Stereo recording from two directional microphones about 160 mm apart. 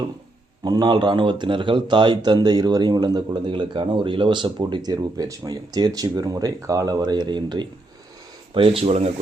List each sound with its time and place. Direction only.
0.6 s speech: 25° right (ahead or behind)